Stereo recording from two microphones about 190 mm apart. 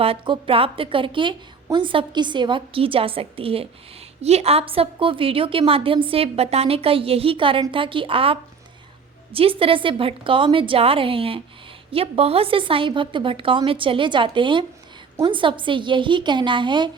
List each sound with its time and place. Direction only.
0.0 s a woman's voice: 30° right (ahead or behind)